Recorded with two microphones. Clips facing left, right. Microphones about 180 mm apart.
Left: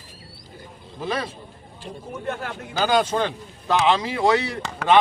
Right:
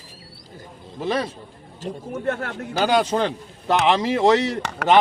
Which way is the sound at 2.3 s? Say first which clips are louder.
Right 4 dB; 65° right (ahead or behind).